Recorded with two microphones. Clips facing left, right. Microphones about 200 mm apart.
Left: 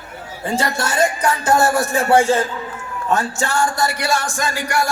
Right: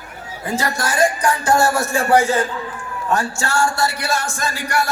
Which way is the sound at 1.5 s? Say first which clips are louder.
Left 1 dB; 15° left (ahead or behind).